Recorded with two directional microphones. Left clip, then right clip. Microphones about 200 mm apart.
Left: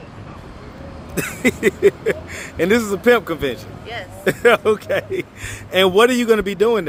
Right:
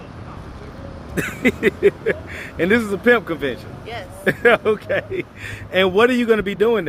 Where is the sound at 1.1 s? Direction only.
25° left (ahead or behind).